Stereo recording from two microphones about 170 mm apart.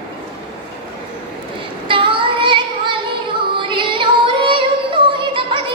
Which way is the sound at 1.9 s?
30° right (ahead or behind).